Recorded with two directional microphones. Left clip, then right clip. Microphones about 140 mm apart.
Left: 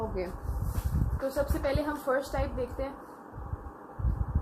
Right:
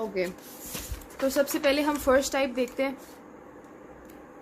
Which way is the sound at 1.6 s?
60° right (ahead or behind).